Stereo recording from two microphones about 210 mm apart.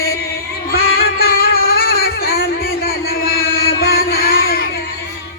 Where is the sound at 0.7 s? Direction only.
45° left (ahead or behind).